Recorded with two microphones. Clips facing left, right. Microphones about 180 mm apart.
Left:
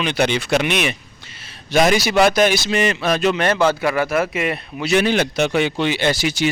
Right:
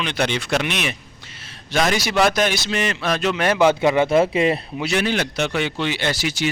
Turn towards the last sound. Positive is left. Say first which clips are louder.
# left 4 dB
turn(degrees=15)  # may be behind; listen again after turning